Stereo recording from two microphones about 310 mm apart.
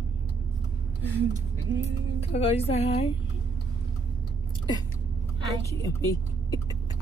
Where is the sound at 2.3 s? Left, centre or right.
Centre.